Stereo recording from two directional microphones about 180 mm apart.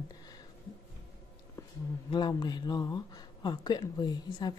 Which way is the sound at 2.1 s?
25° left (ahead or behind).